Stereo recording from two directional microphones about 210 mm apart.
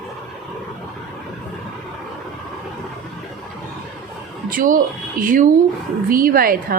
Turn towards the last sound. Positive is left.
turn(degrees=-45)  # may be behind; listen again after turning